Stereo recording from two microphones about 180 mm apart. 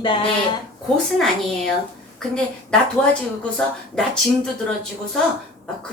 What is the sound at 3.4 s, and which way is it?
Speech, 5° left (ahead or behind).